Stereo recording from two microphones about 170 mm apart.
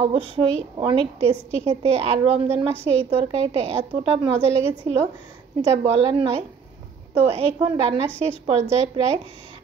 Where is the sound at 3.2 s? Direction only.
35° right (ahead or behind).